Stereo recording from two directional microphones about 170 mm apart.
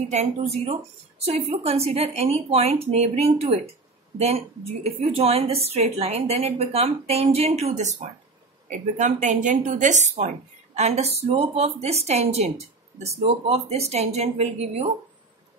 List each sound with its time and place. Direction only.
0.1 s a woman's voice: 40° right (ahead or behind)
5.1 s a woman's voice: 35° right (ahead or behind)